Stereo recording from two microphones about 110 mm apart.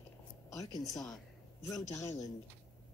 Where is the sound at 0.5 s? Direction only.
30° left (ahead or behind).